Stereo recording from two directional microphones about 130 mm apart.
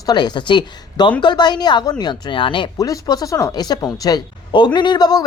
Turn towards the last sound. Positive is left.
turn(degrees=30)  # may be behind; listen again after turning